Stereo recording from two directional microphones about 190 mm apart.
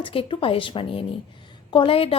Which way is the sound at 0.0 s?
30° left (ahead or behind).